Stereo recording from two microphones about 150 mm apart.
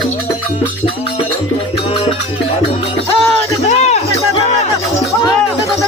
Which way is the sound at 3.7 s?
45° left (ahead or behind).